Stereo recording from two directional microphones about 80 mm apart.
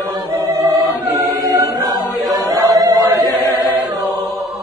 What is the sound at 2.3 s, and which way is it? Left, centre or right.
Chant, right.